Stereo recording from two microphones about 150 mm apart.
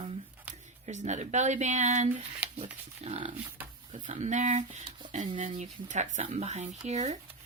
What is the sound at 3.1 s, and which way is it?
Speech, 35° right (ahead or behind).